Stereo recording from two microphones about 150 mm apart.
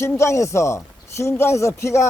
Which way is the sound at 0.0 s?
20° left (ahead or behind).